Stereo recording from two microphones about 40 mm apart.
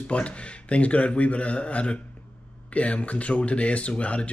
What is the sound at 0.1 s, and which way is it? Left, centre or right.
Speech, left.